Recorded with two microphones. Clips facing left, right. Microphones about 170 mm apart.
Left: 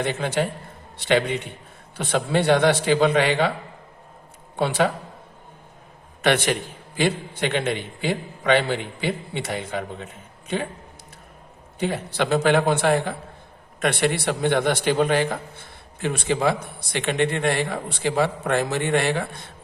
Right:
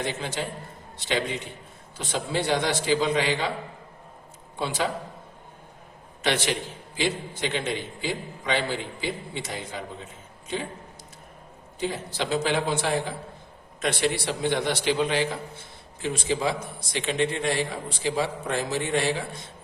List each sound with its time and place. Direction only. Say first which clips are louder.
0.0 s a man's voice: left 6 dB; 60° left (ahead or behind)
4.5 s a man's voice: left 7 dB; 60° left (ahead or behind)
6.2 s a man's voice: left 5 dB; 55° left (ahead or behind)
11.8 s a man's voice: left 5 dB; 60° left (ahead or behind)